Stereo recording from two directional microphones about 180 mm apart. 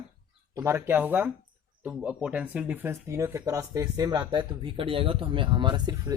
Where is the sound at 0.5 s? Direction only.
15° right (ahead or behind).